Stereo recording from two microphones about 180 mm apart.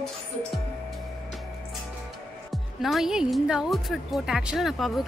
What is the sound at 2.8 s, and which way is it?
Speech, centre (ahead or behind).